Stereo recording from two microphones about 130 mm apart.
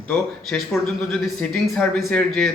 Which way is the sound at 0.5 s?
10° left (ahead or behind).